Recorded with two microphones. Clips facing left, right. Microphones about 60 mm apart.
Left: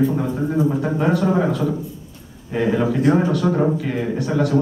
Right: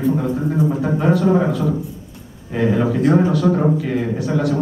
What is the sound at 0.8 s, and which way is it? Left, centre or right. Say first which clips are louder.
A man's voice: right 2 dB; centre.